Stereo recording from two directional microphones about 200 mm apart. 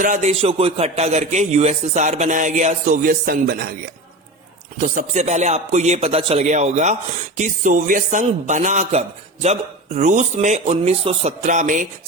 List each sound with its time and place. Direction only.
0.0 s a man's voice: 35° right (ahead or behind)
4.8 s a man's voice: 40° right (ahead or behind)